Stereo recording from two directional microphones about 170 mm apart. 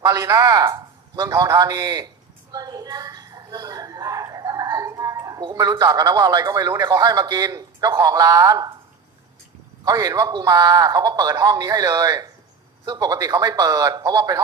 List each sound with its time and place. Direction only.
0.0 s a man's voice: 20° right (ahead or behind)
9.8 s a man's voice: 20° right (ahead or behind)